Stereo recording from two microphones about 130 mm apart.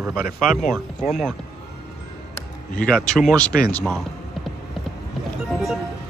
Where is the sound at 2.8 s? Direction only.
5° left (ahead or behind).